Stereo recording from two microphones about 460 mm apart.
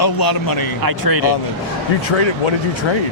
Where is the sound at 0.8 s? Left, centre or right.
Right.